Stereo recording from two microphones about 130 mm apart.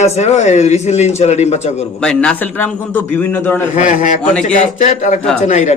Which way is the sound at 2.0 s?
5° left (ahead or behind).